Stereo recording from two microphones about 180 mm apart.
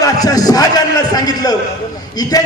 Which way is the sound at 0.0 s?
20° left (ahead or behind).